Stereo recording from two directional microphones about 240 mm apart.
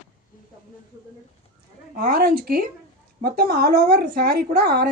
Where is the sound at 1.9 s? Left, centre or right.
Right.